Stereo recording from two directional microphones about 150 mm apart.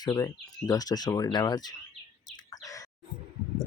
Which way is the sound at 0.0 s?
25° left (ahead or behind).